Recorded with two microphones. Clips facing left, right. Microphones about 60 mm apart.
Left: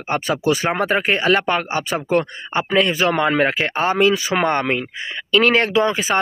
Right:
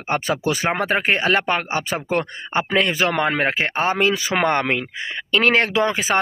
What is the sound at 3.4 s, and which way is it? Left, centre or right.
Speech, right.